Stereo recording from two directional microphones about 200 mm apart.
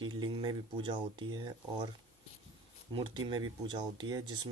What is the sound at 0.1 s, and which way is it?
Speech, 25° right (ahead or behind).